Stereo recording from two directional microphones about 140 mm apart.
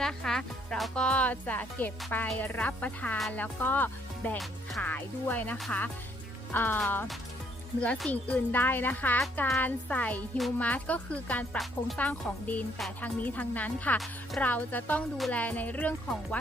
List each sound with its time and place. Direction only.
0.0 s speech: 5° left (ahead or behind)
6.5 s speech: 15° left (ahead or behind)